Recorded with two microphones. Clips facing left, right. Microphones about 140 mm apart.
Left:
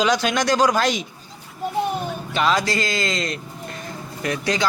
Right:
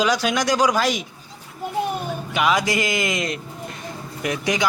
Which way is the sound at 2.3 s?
10° right (ahead or behind).